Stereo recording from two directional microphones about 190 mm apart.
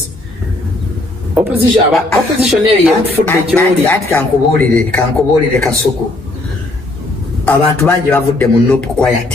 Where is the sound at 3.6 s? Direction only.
10° left (ahead or behind).